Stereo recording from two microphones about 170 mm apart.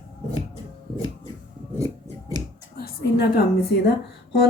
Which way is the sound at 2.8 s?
65° left (ahead or behind).